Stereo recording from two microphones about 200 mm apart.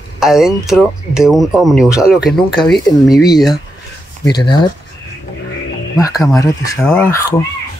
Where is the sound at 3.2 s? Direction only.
20° left (ahead or behind).